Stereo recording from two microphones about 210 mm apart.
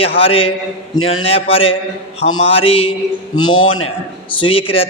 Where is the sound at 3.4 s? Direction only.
70° left (ahead or behind).